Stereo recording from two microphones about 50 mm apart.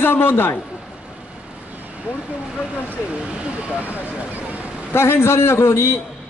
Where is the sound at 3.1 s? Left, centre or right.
Right.